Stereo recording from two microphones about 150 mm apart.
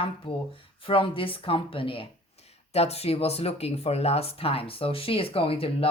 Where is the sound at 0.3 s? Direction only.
35° left (ahead or behind).